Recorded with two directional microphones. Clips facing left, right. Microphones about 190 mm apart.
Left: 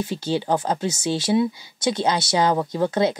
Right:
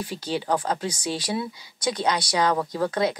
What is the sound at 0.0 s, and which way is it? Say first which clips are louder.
Speech: left 4 dB; 25° left (ahead or behind).